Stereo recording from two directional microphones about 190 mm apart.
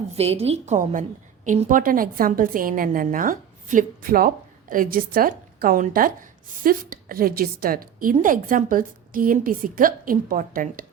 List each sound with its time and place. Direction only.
0.2 s a woman's voice: 30° right (ahead or behind)